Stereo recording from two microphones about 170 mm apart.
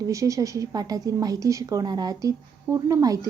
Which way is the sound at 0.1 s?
20° right (ahead or behind).